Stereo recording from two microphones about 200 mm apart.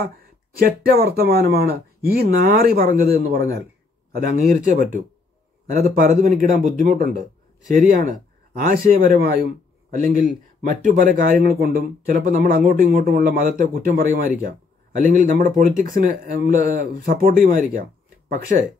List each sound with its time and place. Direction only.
0.6 s a man's voice: 50° right (ahead or behind)